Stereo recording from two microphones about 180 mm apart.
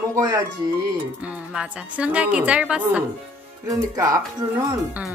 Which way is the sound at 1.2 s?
5° right (ahead or behind).